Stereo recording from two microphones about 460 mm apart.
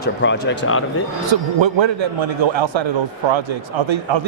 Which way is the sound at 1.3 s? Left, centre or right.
Right.